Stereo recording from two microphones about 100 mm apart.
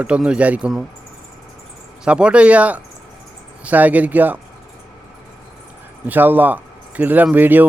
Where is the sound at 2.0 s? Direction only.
10° right (ahead or behind).